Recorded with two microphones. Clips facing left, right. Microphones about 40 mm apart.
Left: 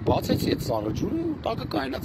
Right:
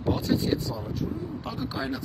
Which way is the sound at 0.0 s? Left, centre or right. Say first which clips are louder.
Left 2 dB; left.